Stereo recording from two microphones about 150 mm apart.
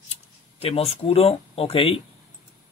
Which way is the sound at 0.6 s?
40° left (ahead or behind).